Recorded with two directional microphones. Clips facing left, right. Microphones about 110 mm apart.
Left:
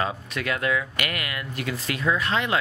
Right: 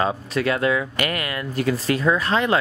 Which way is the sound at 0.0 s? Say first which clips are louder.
Right 6 dB; 30° right (ahead or behind).